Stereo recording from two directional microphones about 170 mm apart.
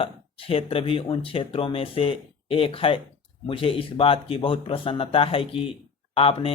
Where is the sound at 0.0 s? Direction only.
35° left (ahead or behind).